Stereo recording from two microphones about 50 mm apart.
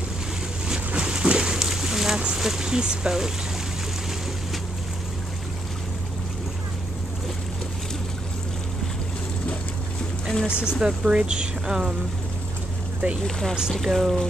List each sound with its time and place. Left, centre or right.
0.7 s a sound: centre
2.3 s speech: centre
10.4 s speech: centre
13.2 s speech: centre